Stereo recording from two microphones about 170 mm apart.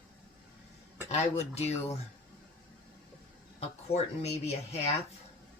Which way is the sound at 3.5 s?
40° left (ahead or behind).